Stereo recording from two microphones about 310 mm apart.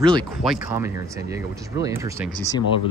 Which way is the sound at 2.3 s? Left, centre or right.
Centre.